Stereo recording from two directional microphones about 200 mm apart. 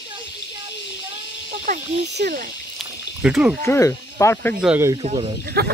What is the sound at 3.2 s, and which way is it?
Speech, 5° right (ahead or behind).